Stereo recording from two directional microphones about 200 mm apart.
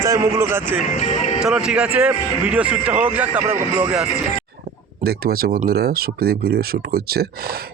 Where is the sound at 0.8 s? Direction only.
35° left (ahead or behind).